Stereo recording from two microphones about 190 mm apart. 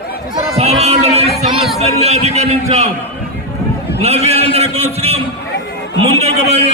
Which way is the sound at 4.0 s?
35° right (ahead or behind).